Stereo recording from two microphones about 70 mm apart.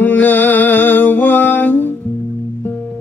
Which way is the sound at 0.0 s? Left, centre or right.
Left.